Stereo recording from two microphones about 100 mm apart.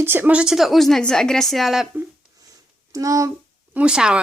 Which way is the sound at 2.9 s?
35° right (ahead or behind).